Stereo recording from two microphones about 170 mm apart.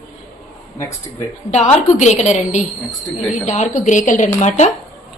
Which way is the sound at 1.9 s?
40° left (ahead or behind).